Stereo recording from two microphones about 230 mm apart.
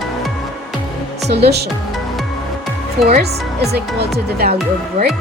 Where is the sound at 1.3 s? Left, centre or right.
Right.